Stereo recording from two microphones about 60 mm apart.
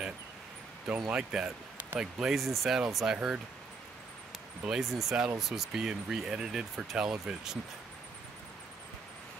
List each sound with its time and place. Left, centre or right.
0.8 s speech: centre
4.6 s speech: centre